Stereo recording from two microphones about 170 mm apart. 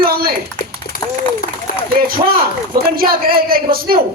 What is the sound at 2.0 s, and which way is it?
A man's voice, 60° right (ahead or behind).